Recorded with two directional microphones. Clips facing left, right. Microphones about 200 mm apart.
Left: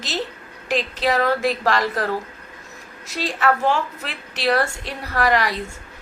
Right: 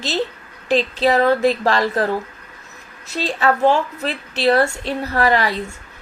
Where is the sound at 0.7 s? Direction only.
30° right (ahead or behind).